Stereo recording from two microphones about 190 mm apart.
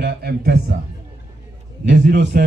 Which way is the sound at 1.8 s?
65° right (ahead or behind).